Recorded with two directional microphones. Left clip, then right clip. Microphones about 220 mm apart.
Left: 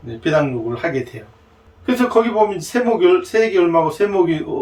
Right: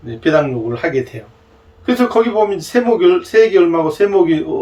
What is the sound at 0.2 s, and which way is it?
A man's voice, 10° right (ahead or behind).